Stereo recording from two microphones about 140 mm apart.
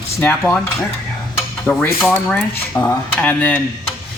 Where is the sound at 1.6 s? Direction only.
10° left (ahead or behind).